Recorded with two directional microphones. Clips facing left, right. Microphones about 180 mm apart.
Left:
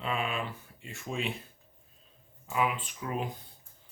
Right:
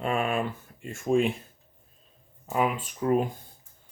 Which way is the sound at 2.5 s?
45° right (ahead or behind).